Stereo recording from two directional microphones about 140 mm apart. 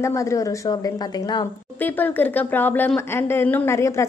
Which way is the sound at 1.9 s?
15° left (ahead or behind).